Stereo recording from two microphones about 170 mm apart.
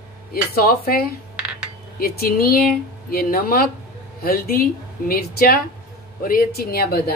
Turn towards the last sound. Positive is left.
turn(degrees=65)  # may be behind; listen again after turning